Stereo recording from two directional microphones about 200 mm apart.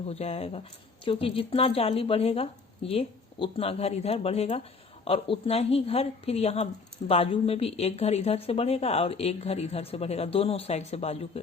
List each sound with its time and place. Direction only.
0.1 s a woman's voice: 30° left (ahead or behind)